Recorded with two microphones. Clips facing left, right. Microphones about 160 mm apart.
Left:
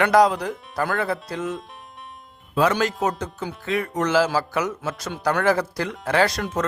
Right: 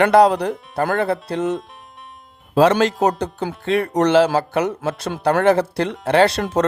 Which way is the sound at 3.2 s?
70° right (ahead or behind).